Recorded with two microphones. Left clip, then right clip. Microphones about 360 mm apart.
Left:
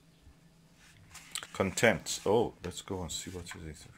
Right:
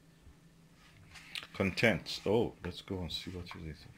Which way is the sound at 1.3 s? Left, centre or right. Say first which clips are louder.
Left 3 dB; centre.